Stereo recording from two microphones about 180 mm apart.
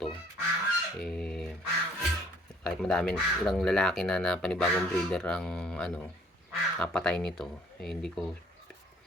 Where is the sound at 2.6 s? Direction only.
5° left (ahead or behind).